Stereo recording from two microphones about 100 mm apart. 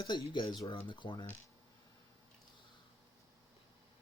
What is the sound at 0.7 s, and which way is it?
Speech, 60° left (ahead or behind).